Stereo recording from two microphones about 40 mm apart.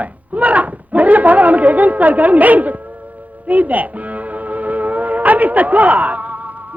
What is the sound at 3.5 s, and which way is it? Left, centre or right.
Music, right.